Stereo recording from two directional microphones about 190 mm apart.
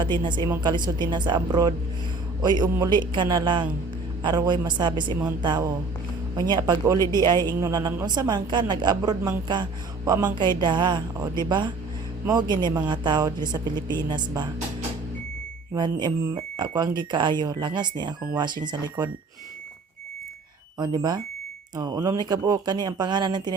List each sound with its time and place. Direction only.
0.0 s a woman's voice: 25° right (ahead or behind)
15.7 s a woman's voice: 25° right (ahead or behind)
20.7 s a woman's voice: 20° right (ahead or behind)